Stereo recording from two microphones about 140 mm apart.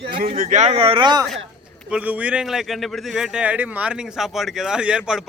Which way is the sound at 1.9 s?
10° right (ahead or behind).